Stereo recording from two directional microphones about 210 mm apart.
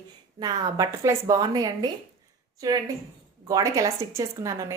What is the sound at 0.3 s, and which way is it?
A woman's voice, 20° right (ahead or behind).